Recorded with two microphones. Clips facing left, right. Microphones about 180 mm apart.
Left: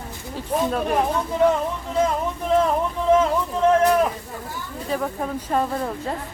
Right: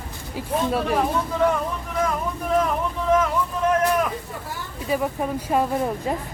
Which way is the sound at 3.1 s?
30° left (ahead or behind).